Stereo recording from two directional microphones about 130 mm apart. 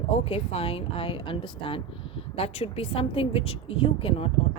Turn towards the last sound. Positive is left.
turn(degrees=45)  # may be behind; listen again after turning